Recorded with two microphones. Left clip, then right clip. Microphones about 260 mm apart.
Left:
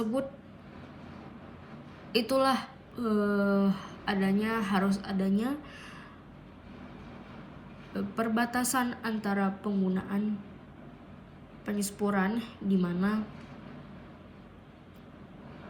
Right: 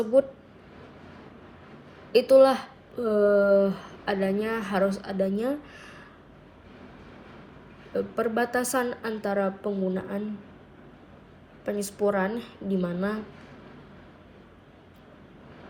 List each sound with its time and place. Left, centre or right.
2.1 s a woman's voice: centre
2.9 s a sound: right
3.6 s a woman's voice: centre
7.9 s a woman's voice: centre
11.6 s a woman's voice: centre